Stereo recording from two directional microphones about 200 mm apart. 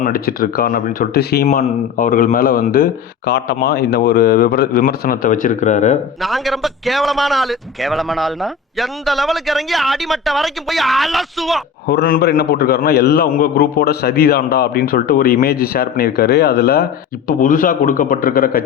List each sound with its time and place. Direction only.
0.0 s a man's voice: 45° left (ahead or behind)
1.5 s a man's voice: 40° left (ahead or behind)
6.2 s a man's voice: centre (ahead or behind)
11.9 s a man's voice: 50° left (ahead or behind)